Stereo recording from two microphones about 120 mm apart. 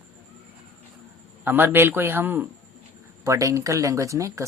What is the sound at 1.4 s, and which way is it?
A man's voice, 15° right (ahead or behind).